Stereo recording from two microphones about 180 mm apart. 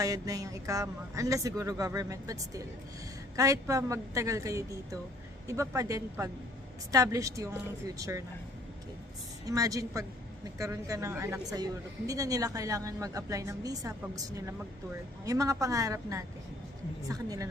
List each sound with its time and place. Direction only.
0.0 s a woman's voice: 20° right (ahead or behind)
9.5 s a woman's voice: 20° right (ahead or behind)